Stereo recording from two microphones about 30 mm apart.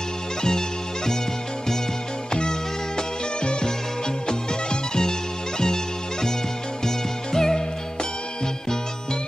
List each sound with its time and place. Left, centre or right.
0.4 s music: centre
4.3 s music: left
7.3 s music: left